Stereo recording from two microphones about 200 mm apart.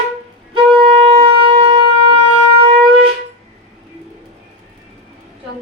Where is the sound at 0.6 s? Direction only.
25° right (ahead or behind).